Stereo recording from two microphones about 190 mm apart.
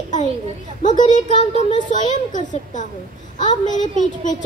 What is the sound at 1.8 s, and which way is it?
A child's voice, 40° left (ahead or behind).